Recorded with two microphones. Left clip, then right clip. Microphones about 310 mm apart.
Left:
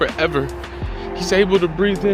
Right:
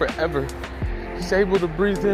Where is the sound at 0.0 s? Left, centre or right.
Centre.